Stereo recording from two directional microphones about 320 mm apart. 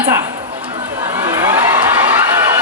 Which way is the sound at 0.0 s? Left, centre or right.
Centre.